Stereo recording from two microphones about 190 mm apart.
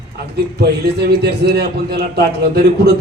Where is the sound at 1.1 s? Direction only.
60° right (ahead or behind).